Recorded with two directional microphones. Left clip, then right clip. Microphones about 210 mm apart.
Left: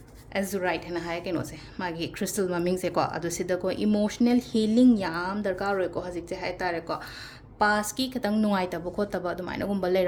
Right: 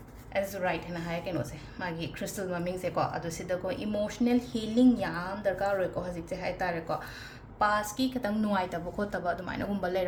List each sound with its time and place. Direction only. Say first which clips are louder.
0.3 s a woman's voice: left 2 dB; 55° left (ahead or behind); by 10.0 s 35° left (ahead or behind)